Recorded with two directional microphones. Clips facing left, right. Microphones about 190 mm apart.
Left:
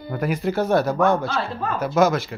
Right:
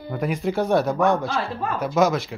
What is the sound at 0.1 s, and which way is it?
A man's voice, centre (ahead or behind).